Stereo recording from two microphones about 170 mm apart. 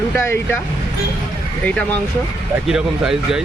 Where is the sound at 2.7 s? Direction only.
5° right (ahead or behind).